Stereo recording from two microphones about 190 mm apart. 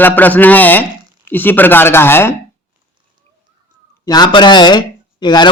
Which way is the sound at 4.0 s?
20° left (ahead or behind).